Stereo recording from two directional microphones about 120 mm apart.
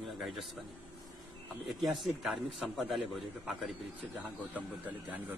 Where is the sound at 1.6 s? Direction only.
Centre (ahead or behind).